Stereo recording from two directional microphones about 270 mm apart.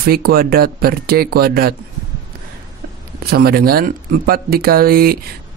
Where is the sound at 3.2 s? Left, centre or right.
Right.